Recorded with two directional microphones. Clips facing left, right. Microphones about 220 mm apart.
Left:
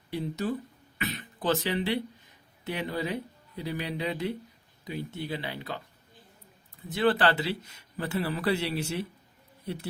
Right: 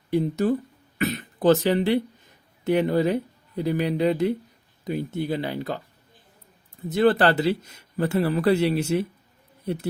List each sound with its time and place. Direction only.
0.1 s speech: 50° right (ahead or behind)
6.9 s speech: 45° right (ahead or behind)